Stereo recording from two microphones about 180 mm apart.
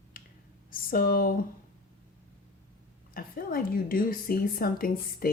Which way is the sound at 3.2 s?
55° left (ahead or behind).